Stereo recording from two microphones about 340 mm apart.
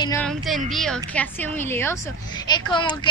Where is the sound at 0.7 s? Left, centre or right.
Centre.